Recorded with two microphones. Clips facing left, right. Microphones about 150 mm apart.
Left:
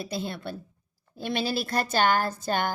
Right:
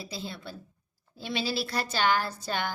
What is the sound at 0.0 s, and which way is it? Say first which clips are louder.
A woman's voice: left 6 dB; 55° left (ahead or behind).